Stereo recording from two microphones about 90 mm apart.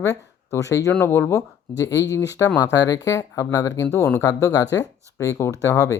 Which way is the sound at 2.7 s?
45° left (ahead or behind).